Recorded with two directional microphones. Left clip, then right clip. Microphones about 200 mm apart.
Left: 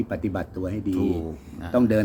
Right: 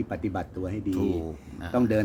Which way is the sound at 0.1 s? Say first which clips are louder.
Left 3 dB; 10° left (ahead or behind).